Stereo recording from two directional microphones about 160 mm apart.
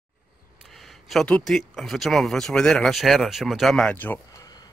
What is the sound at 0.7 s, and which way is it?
Speech, centre (ahead or behind).